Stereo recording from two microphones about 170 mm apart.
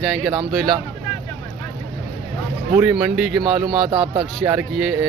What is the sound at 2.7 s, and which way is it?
Speech, 10° right (ahead or behind).